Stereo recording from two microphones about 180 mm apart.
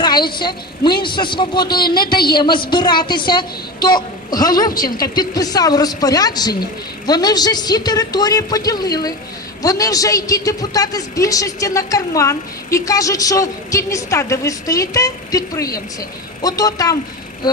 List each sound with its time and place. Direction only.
0.0 s a man's voice: 25° left (ahead or behind)